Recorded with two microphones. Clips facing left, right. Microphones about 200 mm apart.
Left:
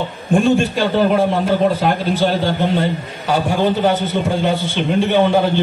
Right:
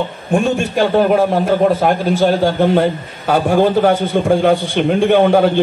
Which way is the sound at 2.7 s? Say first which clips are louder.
Right 4 dB; 55° right (ahead or behind).